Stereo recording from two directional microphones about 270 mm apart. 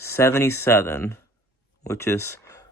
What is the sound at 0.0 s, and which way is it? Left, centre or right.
Speech, centre.